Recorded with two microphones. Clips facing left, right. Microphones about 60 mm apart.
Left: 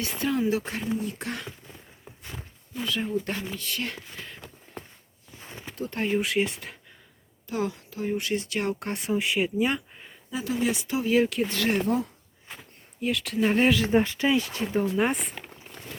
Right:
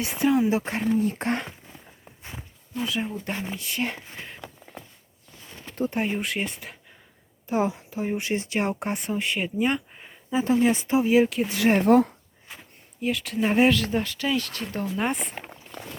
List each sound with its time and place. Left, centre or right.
0.0 s speech: centre
0.6 s speech: right
2.3 s speech: centre
5.4 s a sound: left
5.9 s speech: centre
7.4 s speech: right
8.9 s speech: centre
10.3 s speech: right
11.1 s speech: centre
11.8 s speech: right
12.5 s speech: centre
13.7 s speech: left; by 15.3 s centre